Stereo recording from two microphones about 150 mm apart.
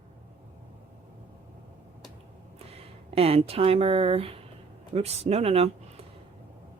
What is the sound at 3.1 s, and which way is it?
A woman's voice, 40° right (ahead or behind).